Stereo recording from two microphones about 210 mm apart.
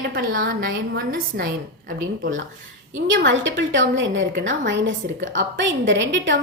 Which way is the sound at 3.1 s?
60° right (ahead or behind).